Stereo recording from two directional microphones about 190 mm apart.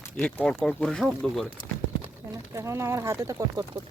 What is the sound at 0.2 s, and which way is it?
Speech, 5° left (ahead or behind).